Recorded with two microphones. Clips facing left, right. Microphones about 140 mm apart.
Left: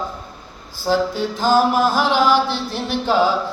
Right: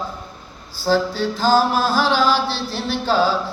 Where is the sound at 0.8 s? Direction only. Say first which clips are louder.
Even; 15° left (ahead or behind).